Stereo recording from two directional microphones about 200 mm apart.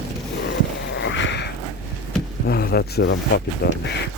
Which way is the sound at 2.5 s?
50° left (ahead or behind).